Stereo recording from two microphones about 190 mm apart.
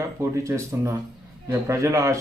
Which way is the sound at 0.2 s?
15° right (ahead or behind).